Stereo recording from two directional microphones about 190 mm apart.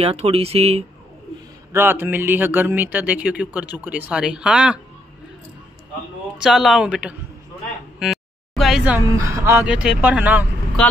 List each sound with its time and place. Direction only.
0.0 s speech: 30° right (ahead or behind)
1.7 s speech: 10° right (ahead or behind)
6.3 s a woman's voice: centre (ahead or behind)
8.0 s a sound: centre (ahead or behind)
9.1 s speech: 15° right (ahead or behind)
10.8 s speech: 5° left (ahead or behind)